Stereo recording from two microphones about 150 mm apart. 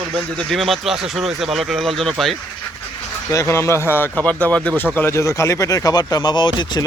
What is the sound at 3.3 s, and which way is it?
Speech, 20° left (ahead or behind).